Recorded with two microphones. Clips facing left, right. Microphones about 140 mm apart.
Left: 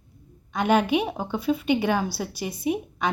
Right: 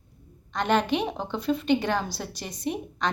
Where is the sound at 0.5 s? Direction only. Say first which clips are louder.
Left 3 dB; 10° left (ahead or behind).